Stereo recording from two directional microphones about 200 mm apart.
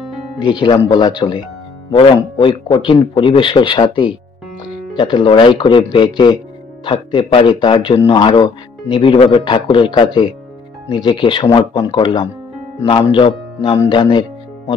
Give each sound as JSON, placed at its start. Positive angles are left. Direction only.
{"t": 0.4, "sound": "speech", "side_deg": 20}